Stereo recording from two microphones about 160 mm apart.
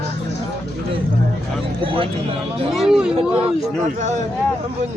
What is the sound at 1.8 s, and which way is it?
Speech, 35° right (ahead or behind).